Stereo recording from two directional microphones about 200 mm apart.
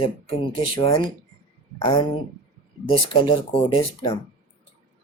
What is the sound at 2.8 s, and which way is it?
Speech, 25° left (ahead or behind).